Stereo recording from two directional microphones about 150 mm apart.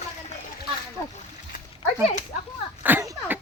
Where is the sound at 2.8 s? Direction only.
10° right (ahead or behind).